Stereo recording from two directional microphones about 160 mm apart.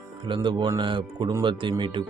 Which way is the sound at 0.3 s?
30° right (ahead or behind).